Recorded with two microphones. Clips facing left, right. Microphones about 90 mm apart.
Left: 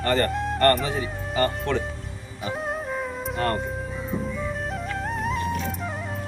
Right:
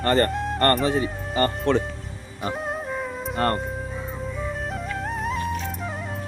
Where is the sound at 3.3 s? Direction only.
45° right (ahead or behind).